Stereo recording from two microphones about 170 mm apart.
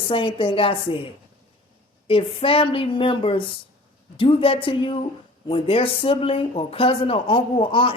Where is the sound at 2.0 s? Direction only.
30° left (ahead or behind).